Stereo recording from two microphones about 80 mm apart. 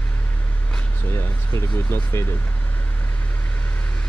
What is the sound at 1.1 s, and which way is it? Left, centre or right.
Speech, left.